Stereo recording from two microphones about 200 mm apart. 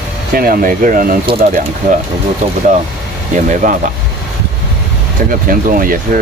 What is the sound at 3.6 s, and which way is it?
Speech, 40° right (ahead or behind).